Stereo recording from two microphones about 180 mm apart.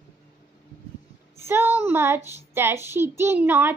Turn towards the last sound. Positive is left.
turn(degrees=-10)  # may be behind; listen again after turning